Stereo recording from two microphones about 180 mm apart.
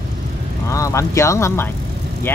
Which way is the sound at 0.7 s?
15° left (ahead or behind).